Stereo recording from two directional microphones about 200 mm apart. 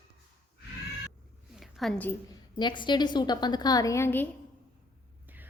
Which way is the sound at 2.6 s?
25° left (ahead or behind).